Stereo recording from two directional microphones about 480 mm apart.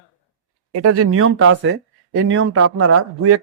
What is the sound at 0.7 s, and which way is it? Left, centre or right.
Speech, right.